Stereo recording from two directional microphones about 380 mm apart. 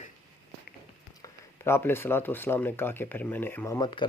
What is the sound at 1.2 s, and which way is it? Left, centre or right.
Speech, centre.